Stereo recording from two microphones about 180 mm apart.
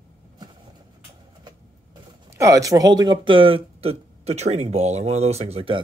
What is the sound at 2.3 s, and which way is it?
A woman's voice, 15° right (ahead or behind).